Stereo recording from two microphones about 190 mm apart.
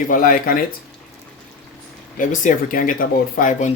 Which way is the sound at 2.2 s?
45° left (ahead or behind).